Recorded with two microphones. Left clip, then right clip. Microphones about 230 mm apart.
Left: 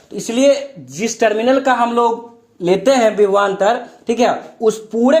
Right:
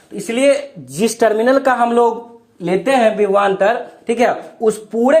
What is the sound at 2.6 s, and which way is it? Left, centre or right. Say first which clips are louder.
Speech: left 1 dB; left.